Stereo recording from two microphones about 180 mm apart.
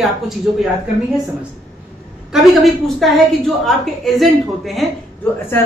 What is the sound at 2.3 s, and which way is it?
A woman's voice, centre (ahead or behind).